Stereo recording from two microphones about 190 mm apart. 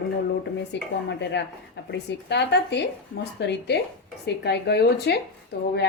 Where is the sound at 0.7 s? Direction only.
65° left (ahead or behind).